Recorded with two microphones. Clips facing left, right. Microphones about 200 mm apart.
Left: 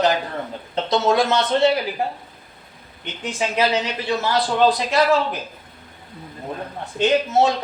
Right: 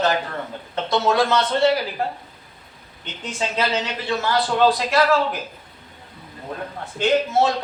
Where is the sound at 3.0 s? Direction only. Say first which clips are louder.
Left 2 dB; 15° left (ahead or behind).